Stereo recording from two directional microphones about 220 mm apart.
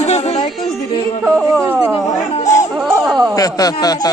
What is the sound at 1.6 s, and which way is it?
Chatter, 10° right (ahead or behind).